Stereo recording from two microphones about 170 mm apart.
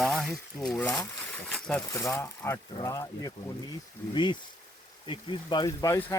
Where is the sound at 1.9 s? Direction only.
15° left (ahead or behind).